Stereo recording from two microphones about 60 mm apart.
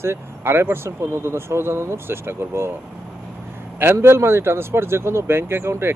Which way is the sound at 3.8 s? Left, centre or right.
Right.